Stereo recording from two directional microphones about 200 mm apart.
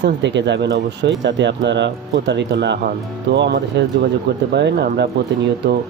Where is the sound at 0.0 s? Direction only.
60° right (ahead or behind).